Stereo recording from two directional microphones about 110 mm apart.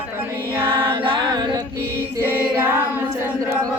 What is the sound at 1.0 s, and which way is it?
Music, 50° right (ahead or behind).